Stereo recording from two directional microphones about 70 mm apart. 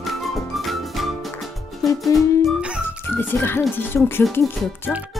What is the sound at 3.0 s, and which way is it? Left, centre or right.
Music, left.